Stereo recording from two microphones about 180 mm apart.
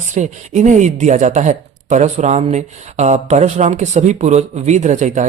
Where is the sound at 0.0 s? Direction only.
40° right (ahead or behind).